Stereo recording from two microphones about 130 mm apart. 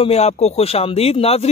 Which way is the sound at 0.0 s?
50° left (ahead or behind).